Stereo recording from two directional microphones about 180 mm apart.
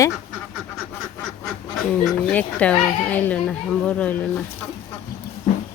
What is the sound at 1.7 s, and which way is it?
Speech, centre (ahead or behind).